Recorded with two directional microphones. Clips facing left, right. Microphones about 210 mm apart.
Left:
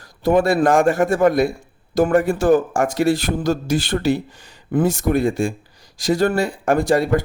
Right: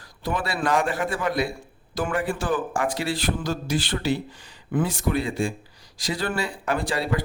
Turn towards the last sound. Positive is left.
turn(degrees=45)  # may be behind; listen again after turning